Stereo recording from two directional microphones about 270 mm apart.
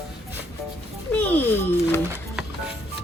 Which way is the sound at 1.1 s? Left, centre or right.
Centre.